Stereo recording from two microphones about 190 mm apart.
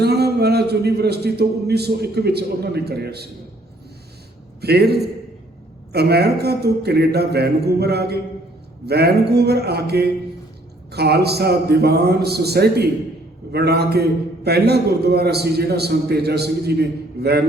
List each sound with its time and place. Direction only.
0.0 s a man's voice: 55° right (ahead or behind)
4.6 s a man's voice: 55° right (ahead or behind)